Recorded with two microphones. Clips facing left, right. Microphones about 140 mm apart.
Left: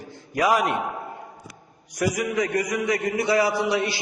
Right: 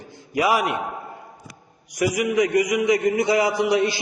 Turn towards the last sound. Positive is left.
turn(degrees=-15)  # may be behind; listen again after turning